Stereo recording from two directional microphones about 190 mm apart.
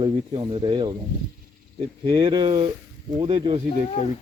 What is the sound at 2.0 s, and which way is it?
Speech, 25° right (ahead or behind).